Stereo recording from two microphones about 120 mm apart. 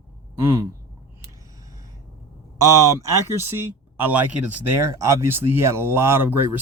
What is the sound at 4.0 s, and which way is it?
Speech, 15° right (ahead or behind).